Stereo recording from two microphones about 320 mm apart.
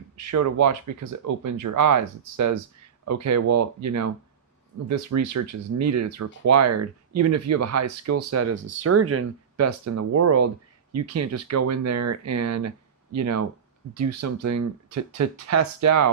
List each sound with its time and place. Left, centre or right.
0.2 s speech: right